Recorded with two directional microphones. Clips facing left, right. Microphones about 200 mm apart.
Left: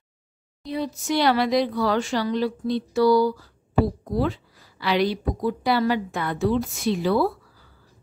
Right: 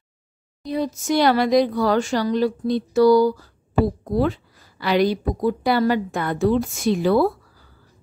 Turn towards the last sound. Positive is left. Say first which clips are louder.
# right 4 dB
turn(degrees=-50)  # may be behind; listen again after turning